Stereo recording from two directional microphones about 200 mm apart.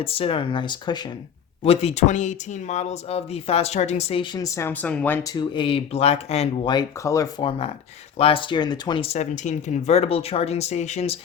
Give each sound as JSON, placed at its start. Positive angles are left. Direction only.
{"t": 0.0, "sound": "speech", "side_deg": 25}
{"t": 5.4, "sound": "speech", "side_deg": 25}